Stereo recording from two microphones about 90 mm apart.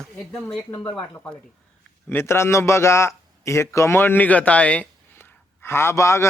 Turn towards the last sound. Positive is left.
turn(degrees=30)  # may be behind; listen again after turning